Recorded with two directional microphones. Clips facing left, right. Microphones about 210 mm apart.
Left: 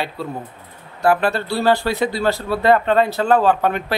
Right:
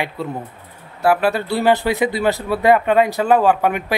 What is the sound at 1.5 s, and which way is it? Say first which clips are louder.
A man's voice: right 1 dB; 20° right (ahead or behind).